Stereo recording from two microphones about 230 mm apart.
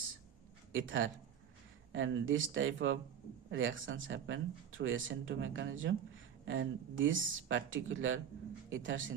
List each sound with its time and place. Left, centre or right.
0.7 s speech: right